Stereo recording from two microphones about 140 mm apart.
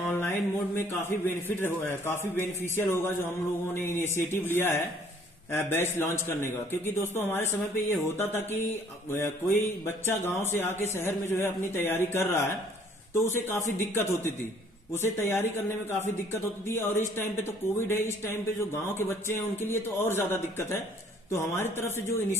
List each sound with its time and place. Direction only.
0.0 s a man's voice: 15° left (ahead or behind)